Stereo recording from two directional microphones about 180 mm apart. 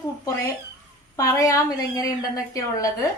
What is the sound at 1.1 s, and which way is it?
Speech, 20° left (ahead or behind).